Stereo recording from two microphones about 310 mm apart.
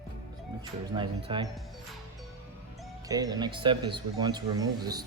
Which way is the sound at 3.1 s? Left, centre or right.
Centre.